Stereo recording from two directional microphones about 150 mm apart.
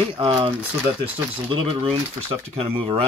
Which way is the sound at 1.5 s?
35° right (ahead or behind).